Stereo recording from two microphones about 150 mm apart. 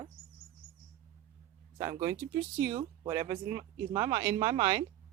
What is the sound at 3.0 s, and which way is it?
Speech, 20° right (ahead or behind).